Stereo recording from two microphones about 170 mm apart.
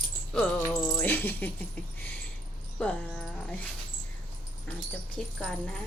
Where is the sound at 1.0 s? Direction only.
10° left (ahead or behind).